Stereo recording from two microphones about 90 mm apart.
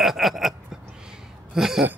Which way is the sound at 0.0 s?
Centre (ahead or behind).